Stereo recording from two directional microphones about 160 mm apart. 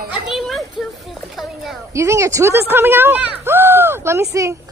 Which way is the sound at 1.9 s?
20° right (ahead or behind).